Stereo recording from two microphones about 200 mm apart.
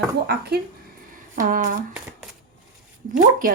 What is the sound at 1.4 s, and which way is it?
Speech, 45° right (ahead or behind).